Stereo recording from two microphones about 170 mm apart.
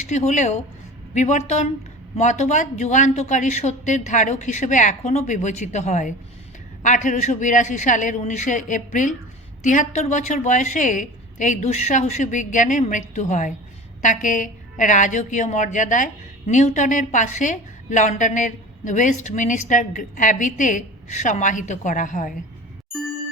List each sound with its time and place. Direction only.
0.0 s a woman's voice: 45° left (ahead or behind)